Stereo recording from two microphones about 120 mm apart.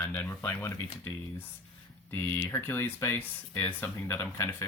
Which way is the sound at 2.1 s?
20° left (ahead or behind).